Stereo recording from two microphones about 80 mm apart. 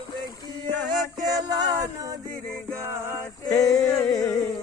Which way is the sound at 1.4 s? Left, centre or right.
Right.